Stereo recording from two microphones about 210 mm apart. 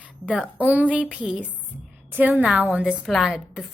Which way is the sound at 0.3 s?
5° right (ahead or behind).